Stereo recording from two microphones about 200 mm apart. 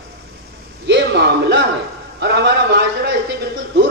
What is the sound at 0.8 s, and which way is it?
A man's voice, 60° right (ahead or behind).